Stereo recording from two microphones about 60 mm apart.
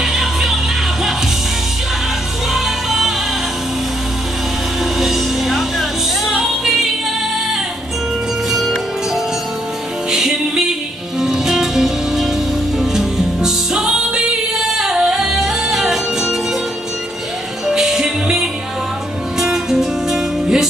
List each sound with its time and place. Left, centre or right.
0.0 s music: centre
2.5 s music: centre
4.9 s music: centre
8.5 s music: centre
17.6 s music: centre